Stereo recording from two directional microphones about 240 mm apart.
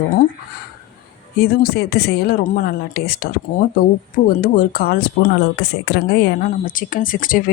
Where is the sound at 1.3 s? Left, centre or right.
Left.